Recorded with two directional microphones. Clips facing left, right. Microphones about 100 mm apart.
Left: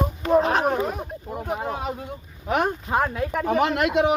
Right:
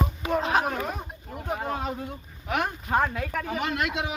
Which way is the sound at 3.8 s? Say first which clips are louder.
Left 8 dB; 55° left (ahead or behind).